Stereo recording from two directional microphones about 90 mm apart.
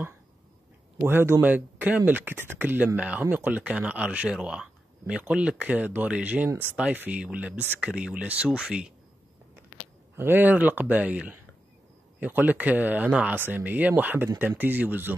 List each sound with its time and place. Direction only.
1.0 s speech: 25° right (ahead or behind); by 8.9 s 10° right (ahead or behind)
10.1 s speech: 25° right (ahead or behind)